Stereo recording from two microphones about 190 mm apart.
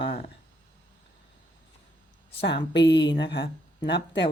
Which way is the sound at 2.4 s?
65° left (ahead or behind).